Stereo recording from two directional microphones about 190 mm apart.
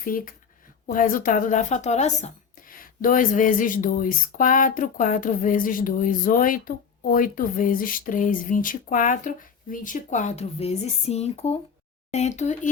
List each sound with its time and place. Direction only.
0.0 s speech: 45° left (ahead or behind)